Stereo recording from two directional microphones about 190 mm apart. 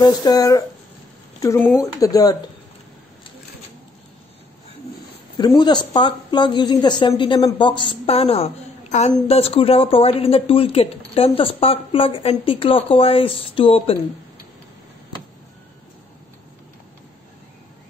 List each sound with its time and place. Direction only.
0.0 s speech: 20° left (ahead or behind)
5.4 s speech: 25° left (ahead or behind)